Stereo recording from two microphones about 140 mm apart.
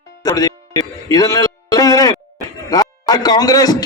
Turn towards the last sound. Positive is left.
turn(degrees=30)  # may be behind; listen again after turning